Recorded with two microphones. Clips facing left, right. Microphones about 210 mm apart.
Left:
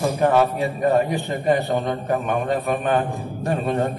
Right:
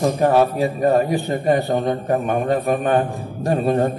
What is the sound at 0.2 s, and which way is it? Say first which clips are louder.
Speech: right 1 dB; 35° right (ahead or behind).